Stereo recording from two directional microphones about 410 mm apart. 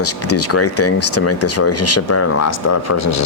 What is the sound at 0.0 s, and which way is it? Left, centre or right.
Speech, left.